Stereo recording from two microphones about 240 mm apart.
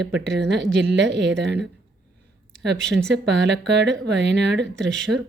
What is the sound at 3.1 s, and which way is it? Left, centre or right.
A woman's voice, right.